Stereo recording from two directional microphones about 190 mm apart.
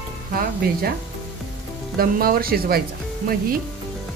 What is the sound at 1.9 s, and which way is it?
Speech, 50° right (ahead or behind).